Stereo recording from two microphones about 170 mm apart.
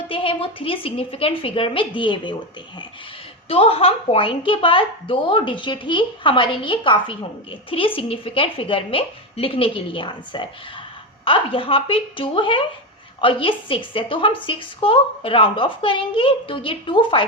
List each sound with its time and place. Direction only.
0.1 s a woman's voice: 30° left (ahead or behind)
3.5 s a woman's voice: 35° left (ahead or behind)